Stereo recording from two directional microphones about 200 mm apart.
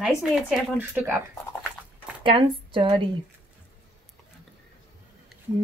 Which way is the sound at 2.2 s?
25° right (ahead or behind).